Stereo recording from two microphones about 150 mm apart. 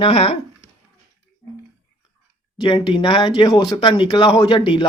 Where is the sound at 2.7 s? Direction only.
35° left (ahead or behind).